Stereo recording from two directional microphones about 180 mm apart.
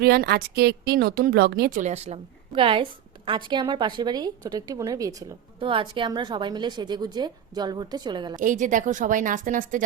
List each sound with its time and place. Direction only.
0.0 s a woman's voice: 60° right (ahead or behind); by 5.1 s 20° right (ahead or behind)
5.5 s a woman's voice: 30° right (ahead or behind)
8.4 s a woman's voice: 45° right (ahead or behind)